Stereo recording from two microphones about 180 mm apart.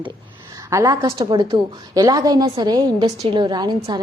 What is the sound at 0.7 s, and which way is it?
A woman's voice, 15° right (ahead or behind).